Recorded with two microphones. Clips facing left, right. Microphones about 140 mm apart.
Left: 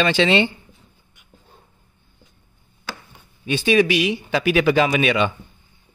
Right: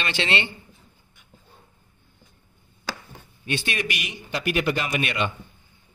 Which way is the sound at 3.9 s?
90° left.